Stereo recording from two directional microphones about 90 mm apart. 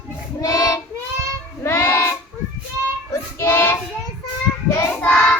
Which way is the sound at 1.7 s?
25° left (ahead or behind).